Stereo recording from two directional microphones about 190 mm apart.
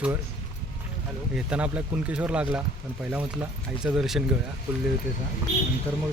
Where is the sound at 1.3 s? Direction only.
5° right (ahead or behind).